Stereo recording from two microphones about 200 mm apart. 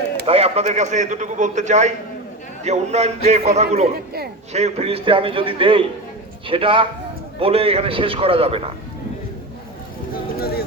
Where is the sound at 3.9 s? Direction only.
50° right (ahead or behind).